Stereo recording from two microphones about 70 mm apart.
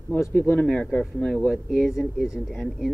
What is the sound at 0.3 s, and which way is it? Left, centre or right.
Speech, left.